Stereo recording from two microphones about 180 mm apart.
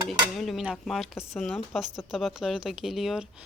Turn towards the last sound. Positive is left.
turn(degrees=0)  # may be behind; listen again after turning